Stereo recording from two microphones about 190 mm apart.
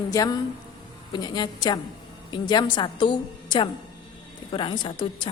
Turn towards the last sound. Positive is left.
turn(degrees=25)  # may be behind; listen again after turning